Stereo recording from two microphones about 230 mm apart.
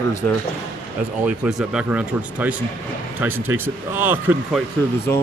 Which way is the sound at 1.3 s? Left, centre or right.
Centre.